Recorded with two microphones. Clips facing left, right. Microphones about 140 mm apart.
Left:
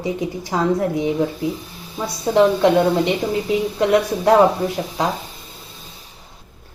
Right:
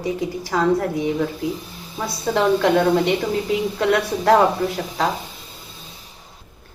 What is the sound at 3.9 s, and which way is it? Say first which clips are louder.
Speech: left 1 dB; 20° left (ahead or behind).